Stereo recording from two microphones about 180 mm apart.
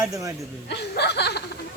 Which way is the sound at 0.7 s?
70° left (ahead or behind).